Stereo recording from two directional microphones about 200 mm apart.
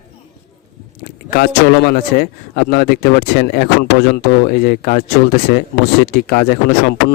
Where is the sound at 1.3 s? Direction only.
50° left (ahead or behind).